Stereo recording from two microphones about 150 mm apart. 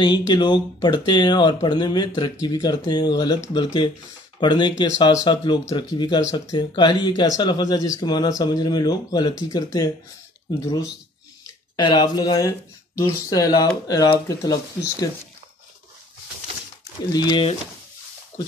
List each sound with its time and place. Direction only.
0.0 s speech: 30° left (ahead or behind)
17.1 s speech: 25° left (ahead or behind)